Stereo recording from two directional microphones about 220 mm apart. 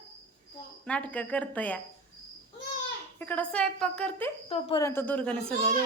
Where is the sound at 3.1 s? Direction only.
5° left (ahead or behind).